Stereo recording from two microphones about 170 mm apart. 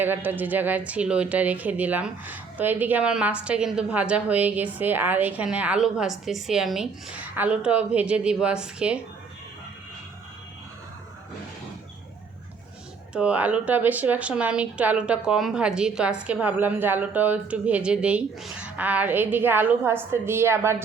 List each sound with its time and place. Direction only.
0.0 s speech: 10° right (ahead or behind)
13.1 s speech: 5° right (ahead or behind)